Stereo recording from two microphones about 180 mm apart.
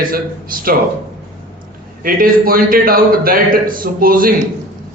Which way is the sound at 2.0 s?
55° right (ahead or behind).